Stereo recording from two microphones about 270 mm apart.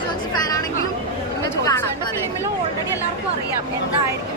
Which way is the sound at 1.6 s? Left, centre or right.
Centre.